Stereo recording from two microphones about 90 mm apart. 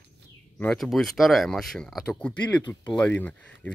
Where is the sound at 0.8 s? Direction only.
Centre (ahead or behind).